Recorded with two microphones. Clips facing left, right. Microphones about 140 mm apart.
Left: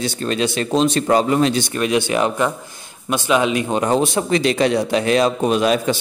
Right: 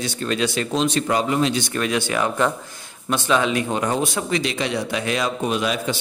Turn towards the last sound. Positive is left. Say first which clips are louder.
# left 6 dB
turn(degrees=40)  # may be behind; listen again after turning